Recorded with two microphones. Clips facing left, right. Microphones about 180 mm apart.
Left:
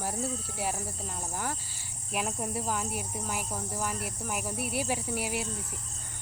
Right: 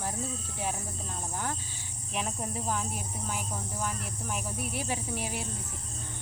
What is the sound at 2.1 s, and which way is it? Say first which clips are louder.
Cricket: left 2 dB; 5° left (ahead or behind).